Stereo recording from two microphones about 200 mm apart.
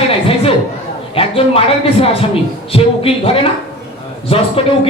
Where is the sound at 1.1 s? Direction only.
30° left (ahead or behind).